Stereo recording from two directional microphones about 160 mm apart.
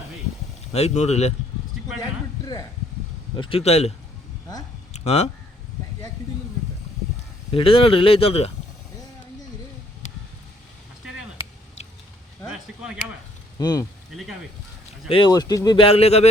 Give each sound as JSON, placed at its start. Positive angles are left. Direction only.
{"t": 0.7, "sound": "speech", "side_deg": 40}
{"t": 2.4, "sound": "speech", "side_deg": 25}
{"t": 3.3, "sound": "speech", "side_deg": 35}
{"t": 4.9, "sound": "speech", "side_deg": 45}
{"t": 7.5, "sound": "speech", "side_deg": 35}
{"t": 13.6, "sound": "speech", "side_deg": 25}
{"t": 15.1, "sound": "speech", "side_deg": 30}